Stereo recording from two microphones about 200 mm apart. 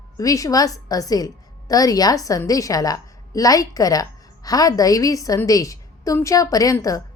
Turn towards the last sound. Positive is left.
turn(degrees=15)  # may be behind; listen again after turning